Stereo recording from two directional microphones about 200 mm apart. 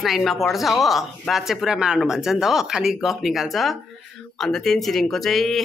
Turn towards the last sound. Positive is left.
turn(degrees=0)  # may be behind; listen again after turning